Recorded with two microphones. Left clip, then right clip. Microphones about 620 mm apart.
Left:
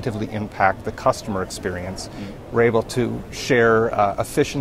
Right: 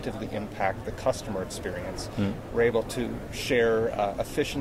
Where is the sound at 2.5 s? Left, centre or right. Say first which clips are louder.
Left 7 dB; left.